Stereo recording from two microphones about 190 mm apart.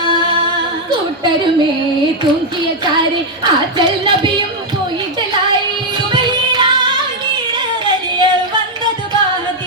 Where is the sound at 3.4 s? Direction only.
25° right (ahead or behind).